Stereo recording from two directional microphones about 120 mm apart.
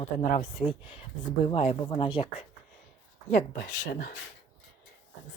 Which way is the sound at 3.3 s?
90° left.